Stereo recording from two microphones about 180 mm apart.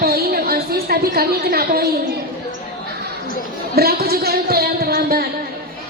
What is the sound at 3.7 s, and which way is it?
A woman's voice, 60° right (ahead or behind).